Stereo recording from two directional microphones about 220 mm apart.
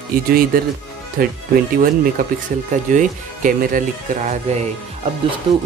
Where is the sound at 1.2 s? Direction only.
40° right (ahead or behind).